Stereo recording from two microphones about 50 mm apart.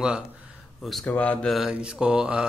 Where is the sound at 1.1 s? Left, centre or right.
Left.